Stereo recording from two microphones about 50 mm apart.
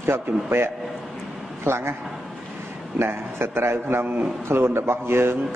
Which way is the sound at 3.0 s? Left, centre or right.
Right.